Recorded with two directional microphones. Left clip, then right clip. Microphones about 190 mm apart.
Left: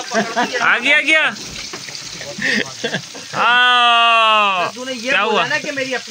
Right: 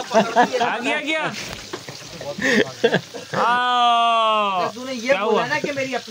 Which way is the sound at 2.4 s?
55° right (ahead or behind).